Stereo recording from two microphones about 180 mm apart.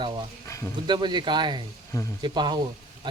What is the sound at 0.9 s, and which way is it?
Speech, 25° right (ahead or behind).